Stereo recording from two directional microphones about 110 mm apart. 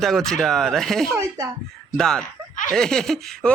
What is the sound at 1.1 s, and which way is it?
Speech, 25° right (ahead or behind).